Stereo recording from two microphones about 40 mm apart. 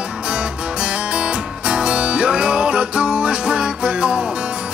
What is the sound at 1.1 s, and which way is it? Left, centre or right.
Music, right.